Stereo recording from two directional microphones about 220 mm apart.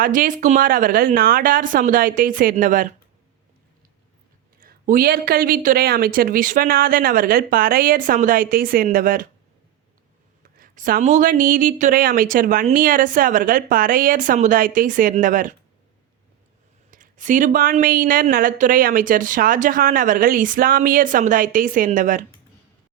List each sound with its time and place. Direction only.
0.0 s speech: 40° right (ahead or behind)
4.6 s speech: 40° right (ahead or behind)
10.4 s speech: 40° right (ahead or behind)
16.9 s speech: 35° right (ahead or behind)